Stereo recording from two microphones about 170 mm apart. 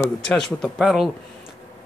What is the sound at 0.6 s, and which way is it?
Speech, 5° right (ahead or behind).